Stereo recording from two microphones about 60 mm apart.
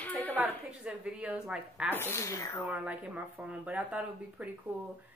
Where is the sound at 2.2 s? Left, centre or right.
Left.